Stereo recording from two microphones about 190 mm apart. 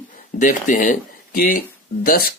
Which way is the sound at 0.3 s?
45° left (ahead or behind).